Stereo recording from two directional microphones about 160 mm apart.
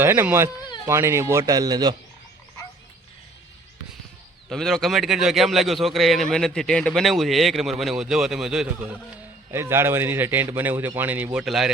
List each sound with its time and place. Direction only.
0.0 s a man's voice: 15° right (ahead or behind)
4.4 s a man's voice: centre (ahead or behind)